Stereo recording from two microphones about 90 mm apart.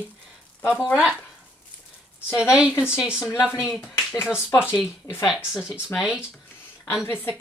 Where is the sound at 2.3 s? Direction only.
10° right (ahead or behind).